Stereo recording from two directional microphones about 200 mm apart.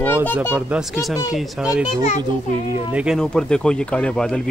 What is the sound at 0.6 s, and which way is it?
Speech, 5° right (ahead or behind).